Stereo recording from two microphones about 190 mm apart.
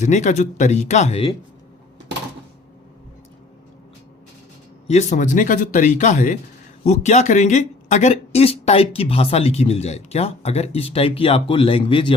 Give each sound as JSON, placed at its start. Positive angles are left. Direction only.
{"t": 0.0, "sound": "speech", "side_deg": 40}
{"t": 4.9, "sound": "speech", "side_deg": 35}